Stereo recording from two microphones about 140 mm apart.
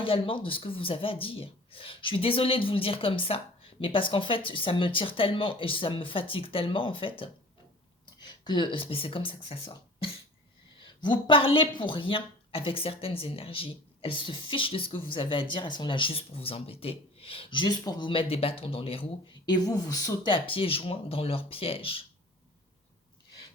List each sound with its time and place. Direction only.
0.0 s a woman's voice: 40° left (ahead or behind)
8.4 s a woman's voice: 35° left (ahead or behind)
19.6 s speech: 25° left (ahead or behind)
20.3 s a woman's voice: 40° left (ahead or behind)